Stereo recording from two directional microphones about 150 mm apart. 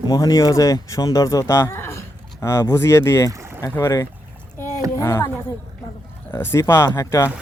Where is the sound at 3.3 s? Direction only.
20° right (ahead or behind).